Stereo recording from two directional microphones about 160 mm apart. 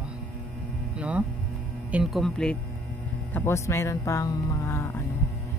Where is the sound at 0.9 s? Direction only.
10° right (ahead or behind).